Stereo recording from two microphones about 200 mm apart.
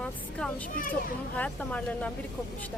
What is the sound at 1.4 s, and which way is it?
Speech, 5° left (ahead or behind).